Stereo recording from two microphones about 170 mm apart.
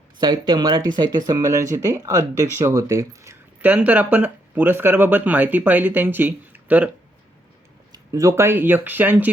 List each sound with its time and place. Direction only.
0.2 s speech: 25° right (ahead or behind); by 6.9 s 10° right (ahead or behind)
7.9 s speech: 20° right (ahead or behind)